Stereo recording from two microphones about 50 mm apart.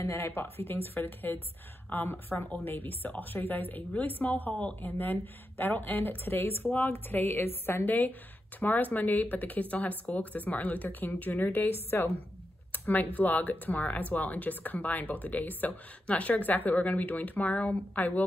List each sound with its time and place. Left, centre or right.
0.0 s a woman's voice: left
11.9 s a woman's voice: left
12.7 s speech: left